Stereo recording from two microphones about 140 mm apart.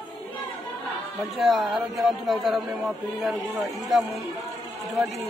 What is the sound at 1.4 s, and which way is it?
Speech, centre (ahead or behind).